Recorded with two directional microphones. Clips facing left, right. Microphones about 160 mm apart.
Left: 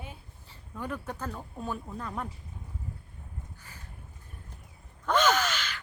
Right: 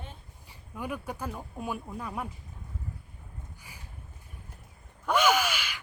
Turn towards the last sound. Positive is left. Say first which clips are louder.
# right 1 dB
turn(degrees=-10)  # may be behind; listen again after turning